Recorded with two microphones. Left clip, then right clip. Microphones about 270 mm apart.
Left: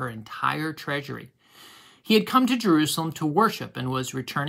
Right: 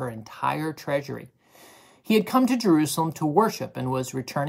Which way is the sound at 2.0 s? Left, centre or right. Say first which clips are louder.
Left 1 dB; left.